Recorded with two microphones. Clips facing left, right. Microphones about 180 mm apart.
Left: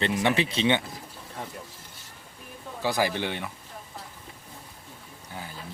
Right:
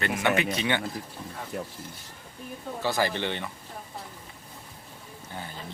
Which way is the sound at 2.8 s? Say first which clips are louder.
Left 1 dB; 10° left (ahead or behind).